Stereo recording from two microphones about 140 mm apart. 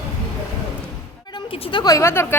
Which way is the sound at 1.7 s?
25° left (ahead or behind).